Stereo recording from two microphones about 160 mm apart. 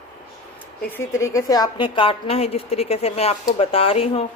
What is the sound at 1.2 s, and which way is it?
A woman's voice, 20° left (ahead or behind).